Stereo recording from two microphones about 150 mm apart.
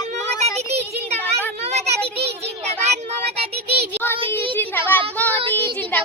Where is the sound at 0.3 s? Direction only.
45° right (ahead or behind).